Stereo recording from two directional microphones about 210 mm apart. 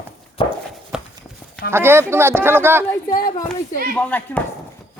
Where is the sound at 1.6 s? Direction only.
10° right (ahead or behind).